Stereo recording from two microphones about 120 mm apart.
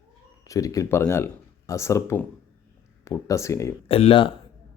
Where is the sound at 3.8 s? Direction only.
55° left (ahead or behind).